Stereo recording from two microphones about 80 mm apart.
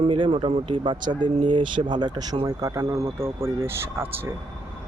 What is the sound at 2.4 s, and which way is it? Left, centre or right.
Speech, right.